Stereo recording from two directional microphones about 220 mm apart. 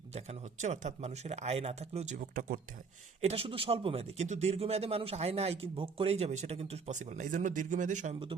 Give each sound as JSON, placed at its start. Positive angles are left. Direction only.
{"t": 0.1, "sound": "speech", "side_deg": -30}
{"t": 3.2, "sound": "a man's voice", "side_deg": -25}